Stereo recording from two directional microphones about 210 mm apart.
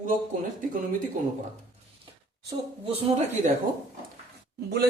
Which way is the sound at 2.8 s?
30° right (ahead or behind).